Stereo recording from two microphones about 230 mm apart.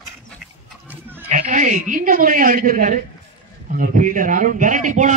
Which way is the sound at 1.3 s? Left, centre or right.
Right.